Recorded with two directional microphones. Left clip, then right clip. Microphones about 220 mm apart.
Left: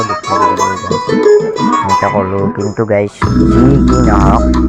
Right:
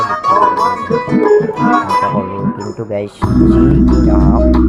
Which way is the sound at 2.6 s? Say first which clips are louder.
Left 7 dB; 20° left (ahead or behind).